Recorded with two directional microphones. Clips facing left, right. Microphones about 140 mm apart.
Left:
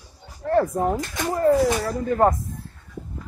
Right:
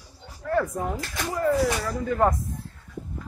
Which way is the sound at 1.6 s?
30° left (ahead or behind).